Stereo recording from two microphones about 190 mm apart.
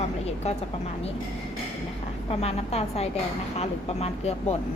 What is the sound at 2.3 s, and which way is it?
A woman's voice, 35° left (ahead or behind).